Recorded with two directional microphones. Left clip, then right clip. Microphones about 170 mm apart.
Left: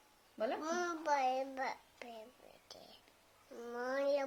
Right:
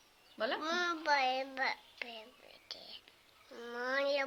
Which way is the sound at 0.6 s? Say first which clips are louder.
Right 4 dB; 20° left (ahead or behind).